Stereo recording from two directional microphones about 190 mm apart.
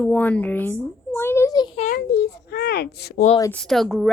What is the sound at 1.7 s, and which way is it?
Speech, 40° left (ahead or behind).